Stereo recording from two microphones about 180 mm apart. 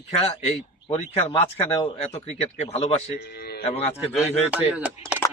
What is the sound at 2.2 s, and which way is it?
Speech, 35° left (ahead or behind).